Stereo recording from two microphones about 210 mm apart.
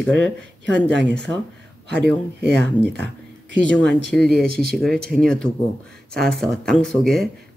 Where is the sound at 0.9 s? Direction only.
55° right (ahead or behind).